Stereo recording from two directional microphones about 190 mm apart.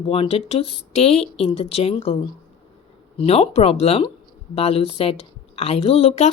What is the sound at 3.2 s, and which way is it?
Speech, 30° left (ahead or behind).